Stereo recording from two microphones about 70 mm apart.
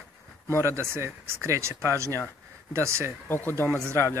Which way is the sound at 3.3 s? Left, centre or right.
Left.